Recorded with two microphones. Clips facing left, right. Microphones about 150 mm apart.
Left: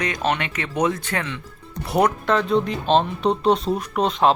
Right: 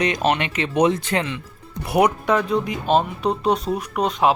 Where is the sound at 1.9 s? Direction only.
10° right (ahead or behind).